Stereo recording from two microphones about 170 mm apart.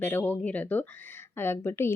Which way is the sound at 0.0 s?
10° left (ahead or behind).